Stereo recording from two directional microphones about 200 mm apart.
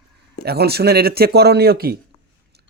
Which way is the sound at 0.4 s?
50° right (ahead or behind).